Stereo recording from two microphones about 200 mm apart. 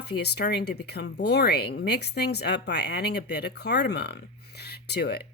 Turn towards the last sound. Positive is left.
turn(degrees=55)  # may be behind; listen again after turning